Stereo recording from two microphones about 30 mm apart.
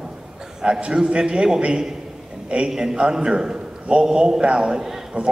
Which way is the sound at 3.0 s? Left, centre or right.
Right.